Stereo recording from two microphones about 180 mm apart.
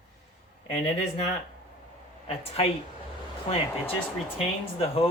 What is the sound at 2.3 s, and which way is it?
Speech, 35° left (ahead or behind).